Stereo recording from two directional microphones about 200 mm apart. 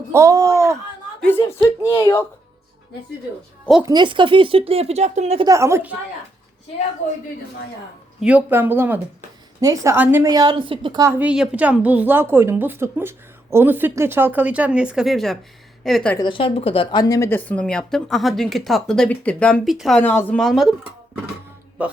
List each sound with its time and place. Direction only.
0.1 s speech: 15° right (ahead or behind)
1.2 s speech: 10° left (ahead or behind)
3.8 s speech: 20° right (ahead or behind)
5.5 s a woman's voice: 15° right (ahead or behind)
8.2 s a woman's voice: 5° right (ahead or behind)
16.1 s speech: 25° left (ahead or behind); by 20.7 s centre (ahead or behind)
21.8 s a woman's voice: 5° right (ahead or behind)